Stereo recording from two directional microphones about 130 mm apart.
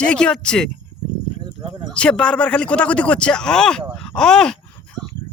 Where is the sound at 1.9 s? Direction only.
10° left (ahead or behind).